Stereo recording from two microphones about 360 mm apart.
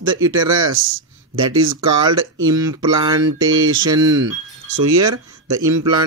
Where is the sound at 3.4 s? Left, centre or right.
Right.